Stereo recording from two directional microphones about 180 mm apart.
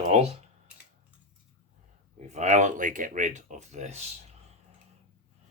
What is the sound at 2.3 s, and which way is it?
Speech, 40° right (ahead or behind).